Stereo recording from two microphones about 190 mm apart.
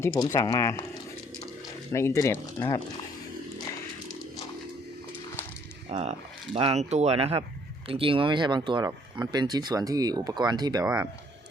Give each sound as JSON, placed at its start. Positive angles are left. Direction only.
{"t": 0.3, "sound": "speech", "side_deg": 20}
{"t": 1.9, "sound": "speech", "side_deg": 15}
{"t": 5.9, "sound": "speech", "side_deg": -35}
{"t": 10.8, "sound": "speech", "side_deg": -5}